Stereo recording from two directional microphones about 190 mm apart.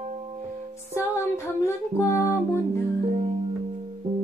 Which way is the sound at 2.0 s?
15° left (ahead or behind).